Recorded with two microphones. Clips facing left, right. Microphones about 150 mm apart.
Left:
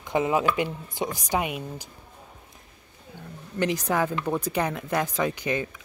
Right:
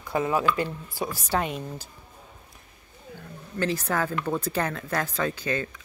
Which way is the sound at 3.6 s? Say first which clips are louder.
Left 2 dB; 15° left (ahead or behind).